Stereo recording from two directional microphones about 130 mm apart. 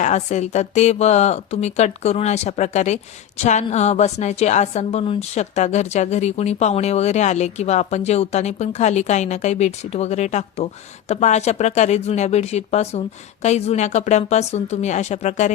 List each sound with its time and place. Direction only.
0.0 s speech: 60° left (ahead or behind)